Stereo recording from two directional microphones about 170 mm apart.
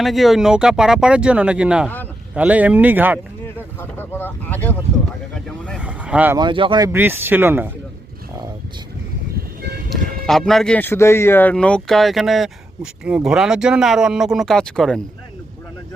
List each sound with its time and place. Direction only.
0.0 s speech: centre (ahead or behind)
3.4 s speech: 15° left (ahead or behind)
5.3 s vehicle: 5° left (ahead or behind)
5.8 s vehicle: 10° right (ahead or behind)
6.3 s speech: 30° right (ahead or behind)
6.9 s speech: 10° right (ahead or behind)
9.9 s speech: centre (ahead or behind)